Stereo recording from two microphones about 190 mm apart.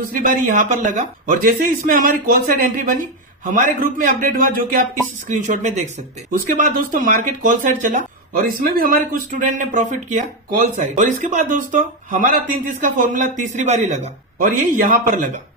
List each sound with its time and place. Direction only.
0.1 s speech: 45° right (ahead or behind)